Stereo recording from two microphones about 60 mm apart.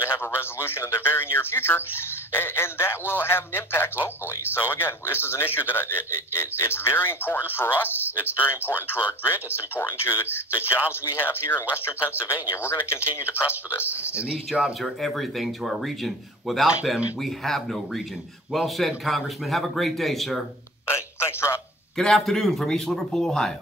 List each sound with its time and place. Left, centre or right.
0.0 s speech: left
14.1 s speech: centre
14.8 s speech: centre
20.8 s a man's voice: left
21.9 s speech: centre